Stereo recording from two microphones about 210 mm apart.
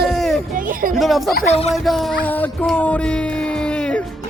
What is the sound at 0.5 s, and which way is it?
Speech, 40° right (ahead or behind).